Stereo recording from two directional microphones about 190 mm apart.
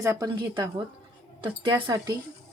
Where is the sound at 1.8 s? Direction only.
20° right (ahead or behind).